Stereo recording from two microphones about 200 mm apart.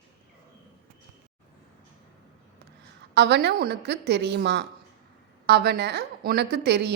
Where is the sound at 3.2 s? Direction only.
55° right (ahead or behind).